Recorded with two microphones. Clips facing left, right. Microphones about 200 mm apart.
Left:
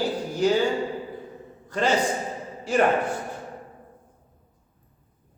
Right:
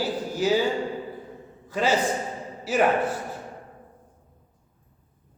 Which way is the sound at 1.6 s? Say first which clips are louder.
Even; 5° right (ahead or behind).